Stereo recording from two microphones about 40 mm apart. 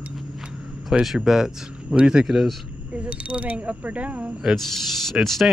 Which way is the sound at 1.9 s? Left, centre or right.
Right.